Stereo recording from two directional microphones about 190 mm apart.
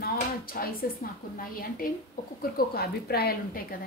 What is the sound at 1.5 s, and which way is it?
A woman's voice, 50° left (ahead or behind).